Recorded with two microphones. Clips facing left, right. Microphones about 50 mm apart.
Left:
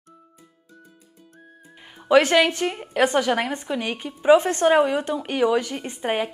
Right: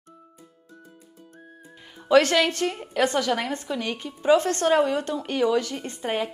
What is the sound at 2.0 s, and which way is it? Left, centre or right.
A woman's voice, centre.